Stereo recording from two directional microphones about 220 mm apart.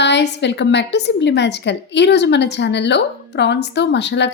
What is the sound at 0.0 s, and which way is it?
A woman's voice, 50° left (ahead or behind).